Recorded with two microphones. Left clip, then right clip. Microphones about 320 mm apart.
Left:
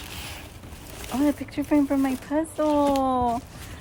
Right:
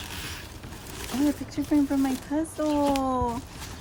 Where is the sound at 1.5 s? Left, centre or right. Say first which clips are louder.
Left 2 dB; centre.